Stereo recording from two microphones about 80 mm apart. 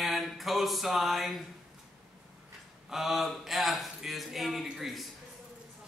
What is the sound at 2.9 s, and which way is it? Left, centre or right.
Speech, centre.